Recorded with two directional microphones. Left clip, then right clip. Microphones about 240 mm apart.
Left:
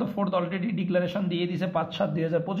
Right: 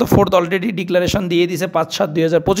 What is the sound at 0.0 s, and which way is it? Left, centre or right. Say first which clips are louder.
A man's voice: right 14 dB; right.